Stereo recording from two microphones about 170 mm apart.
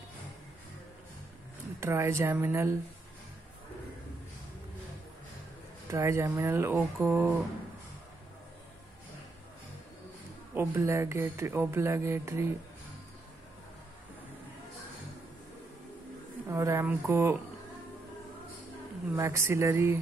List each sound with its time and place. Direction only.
1.8 s speech: 15° right (ahead or behind)
5.9 s speech: 15° right (ahead or behind)
10.5 s speech: 15° right (ahead or behind)
16.4 s speech: 15° right (ahead or behind)
19.1 s speech: 15° right (ahead or behind)